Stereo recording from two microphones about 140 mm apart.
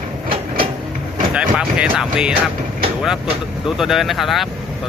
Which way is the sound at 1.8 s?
5° right (ahead or behind).